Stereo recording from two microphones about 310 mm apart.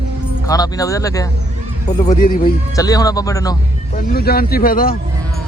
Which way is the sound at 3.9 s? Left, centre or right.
Left.